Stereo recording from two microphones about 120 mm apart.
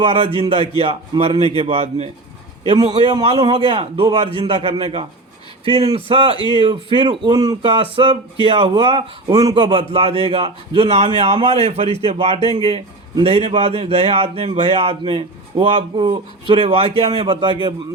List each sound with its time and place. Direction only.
0.0 s a man's voice: 50° right (ahead or behind)
2.6 s a man's voice: 40° right (ahead or behind)
9.3 s a man's voice: 30° right (ahead or behind)
9.9 s a man's voice: 55° right (ahead or behind)